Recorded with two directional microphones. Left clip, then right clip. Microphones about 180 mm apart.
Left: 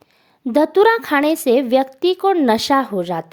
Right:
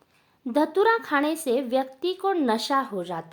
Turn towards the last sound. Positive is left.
turn(degrees=40)  # may be behind; listen again after turning